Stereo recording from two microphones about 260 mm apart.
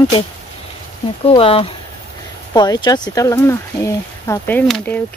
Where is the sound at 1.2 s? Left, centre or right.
Left.